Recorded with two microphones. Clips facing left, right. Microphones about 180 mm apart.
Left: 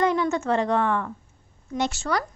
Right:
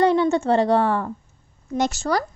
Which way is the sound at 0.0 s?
30° right (ahead or behind).